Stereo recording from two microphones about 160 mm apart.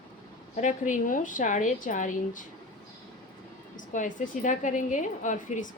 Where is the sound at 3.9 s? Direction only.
55° left (ahead or behind).